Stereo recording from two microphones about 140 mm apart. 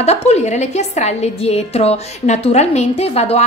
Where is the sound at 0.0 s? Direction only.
50° left (ahead or behind).